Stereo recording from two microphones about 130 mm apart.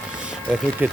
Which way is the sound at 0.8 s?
15° right (ahead or behind).